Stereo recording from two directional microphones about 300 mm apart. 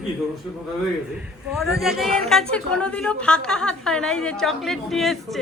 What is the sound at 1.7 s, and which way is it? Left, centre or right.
Speech, centre.